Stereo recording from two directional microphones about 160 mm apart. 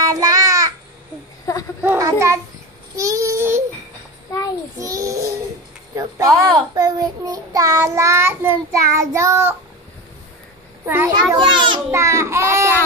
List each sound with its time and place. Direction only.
0.1 s child singing: 20° right (ahead or behind)
1.8 s a child's voice: 15° right (ahead or behind)
3.0 s child singing: 20° right (ahead or behind)
4.7 s a sound: 20° right (ahead or behind)
5.9 s a child's voice: 20° right (ahead or behind)
10.9 s a child's voice: 15° right (ahead or behind)
11.3 s a child's voice: 30° right (ahead or behind)
11.9 s a child's voice: 15° right (ahead or behind)